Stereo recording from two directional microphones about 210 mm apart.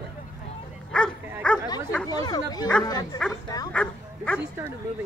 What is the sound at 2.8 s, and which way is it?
Speech, 20° left (ahead or behind).